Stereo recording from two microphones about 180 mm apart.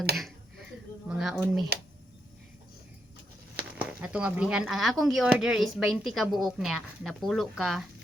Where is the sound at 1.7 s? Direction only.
65° right (ahead or behind).